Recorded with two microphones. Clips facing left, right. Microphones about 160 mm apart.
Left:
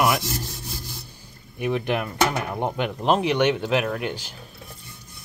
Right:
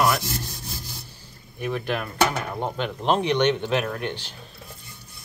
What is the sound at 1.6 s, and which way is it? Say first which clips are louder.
Speech: left 3 dB; 15° left (ahead or behind).